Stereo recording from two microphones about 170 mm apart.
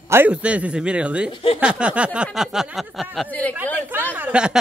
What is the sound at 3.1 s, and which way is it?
Speech, 10° left (ahead or behind).